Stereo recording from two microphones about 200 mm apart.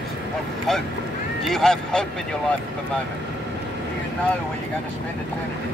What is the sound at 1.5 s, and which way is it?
Speech, centre (ahead or behind).